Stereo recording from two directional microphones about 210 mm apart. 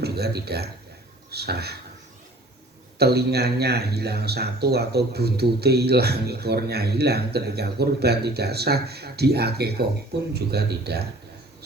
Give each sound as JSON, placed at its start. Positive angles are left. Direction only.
{"t": 0.0, "sound": "a man's voice", "side_deg": -50}
{"t": 3.0, "sound": "speech", "side_deg": -50}